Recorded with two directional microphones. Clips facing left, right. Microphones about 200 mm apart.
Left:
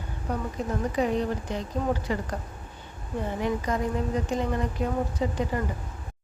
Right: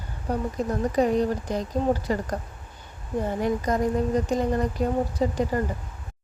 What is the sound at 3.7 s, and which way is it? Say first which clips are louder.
A woman's voice: right 4 dB; 40° right (ahead or behind).